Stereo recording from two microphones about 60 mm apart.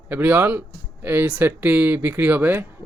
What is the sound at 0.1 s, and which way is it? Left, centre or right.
Speech, right.